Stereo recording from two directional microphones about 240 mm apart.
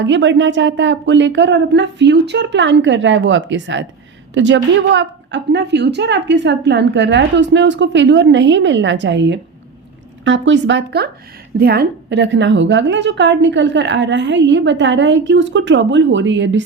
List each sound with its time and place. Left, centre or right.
0.0 s a woman's voice: right